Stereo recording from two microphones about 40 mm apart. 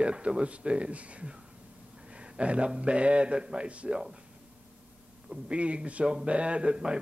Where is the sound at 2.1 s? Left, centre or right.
Right.